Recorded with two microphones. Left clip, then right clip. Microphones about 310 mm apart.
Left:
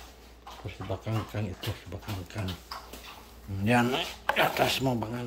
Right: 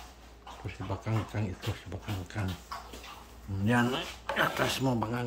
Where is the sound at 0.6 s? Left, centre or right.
Centre.